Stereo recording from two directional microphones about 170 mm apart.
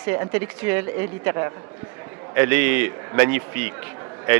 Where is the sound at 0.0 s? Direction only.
15° right (ahead or behind).